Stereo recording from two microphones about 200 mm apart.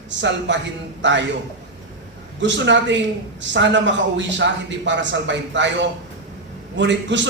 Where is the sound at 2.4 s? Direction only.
65° right (ahead or behind).